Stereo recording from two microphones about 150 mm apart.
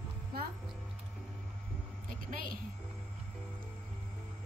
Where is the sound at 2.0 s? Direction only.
70° right (ahead or behind).